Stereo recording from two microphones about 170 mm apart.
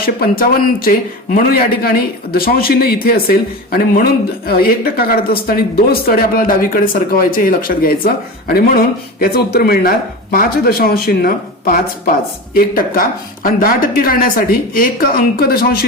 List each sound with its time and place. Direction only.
0.0 s a man's voice: 60° left (ahead or behind)